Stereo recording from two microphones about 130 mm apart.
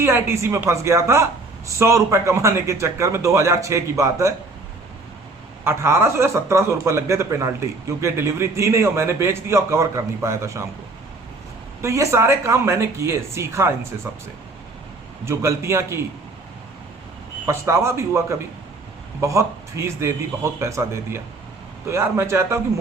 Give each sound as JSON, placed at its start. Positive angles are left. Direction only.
{"t": 0.0, "sound": "a man's voice", "side_deg": -20}
{"t": 5.6, "sound": "a man's voice", "side_deg": -20}
{"t": 11.8, "sound": "a man's voice", "side_deg": -20}
{"t": 15.2, "sound": "a man's voice", "side_deg": -20}
{"t": 17.4, "sound": "a man's voice", "side_deg": -20}